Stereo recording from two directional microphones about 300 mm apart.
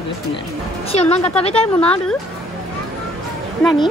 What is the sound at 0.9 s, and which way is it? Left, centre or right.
Speech, left.